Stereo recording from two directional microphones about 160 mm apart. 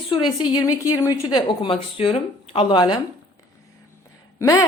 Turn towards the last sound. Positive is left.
turn(degrees=20)  # may be behind; listen again after turning